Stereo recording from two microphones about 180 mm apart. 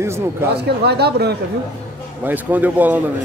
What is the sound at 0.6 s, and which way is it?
Speech, 65° right (ahead or behind).